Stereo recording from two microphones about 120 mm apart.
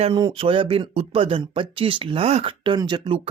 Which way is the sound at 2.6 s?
40° right (ahead or behind).